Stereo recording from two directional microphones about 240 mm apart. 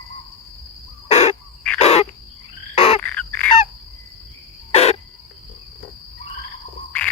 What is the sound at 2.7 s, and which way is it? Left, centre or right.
Fowl, left.